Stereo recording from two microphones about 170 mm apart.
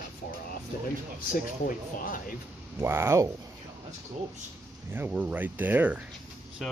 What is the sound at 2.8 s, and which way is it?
Speech, 15° right (ahead or behind).